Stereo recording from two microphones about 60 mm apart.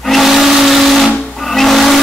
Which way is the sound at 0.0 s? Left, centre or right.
Centre.